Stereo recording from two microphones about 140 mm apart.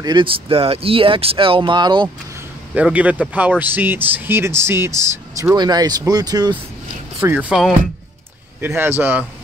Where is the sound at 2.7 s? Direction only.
10° right (ahead or behind); by 6.6 s 30° right (ahead or behind).